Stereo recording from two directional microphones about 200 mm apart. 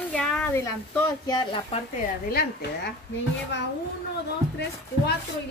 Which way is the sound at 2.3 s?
50° left (ahead or behind).